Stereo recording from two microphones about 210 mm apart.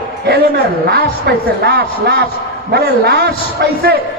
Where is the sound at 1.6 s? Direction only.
50° right (ahead or behind).